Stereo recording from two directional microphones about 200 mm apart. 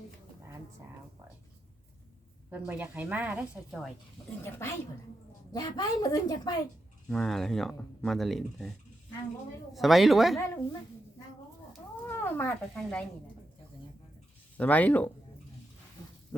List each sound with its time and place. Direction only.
2.5 s a woman's voice: 10° right (ahead or behind)
4.4 s a woman's voice: 10° left (ahead or behind)
7.1 s speech: centre (ahead or behind)
9.7 s speech: centre (ahead or behind)
10.3 s speech: 15° left (ahead or behind)
12.0 s speech: 10° left (ahead or behind)
14.6 s speech: 10° left (ahead or behind)